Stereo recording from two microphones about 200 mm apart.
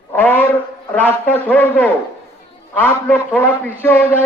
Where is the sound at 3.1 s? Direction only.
10° left (ahead or behind).